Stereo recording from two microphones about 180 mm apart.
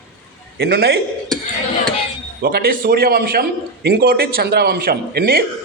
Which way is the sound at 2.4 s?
55° right (ahead or behind).